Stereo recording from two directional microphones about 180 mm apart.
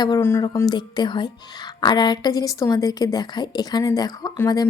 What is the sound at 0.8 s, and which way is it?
A woman's voice, 25° left (ahead or behind).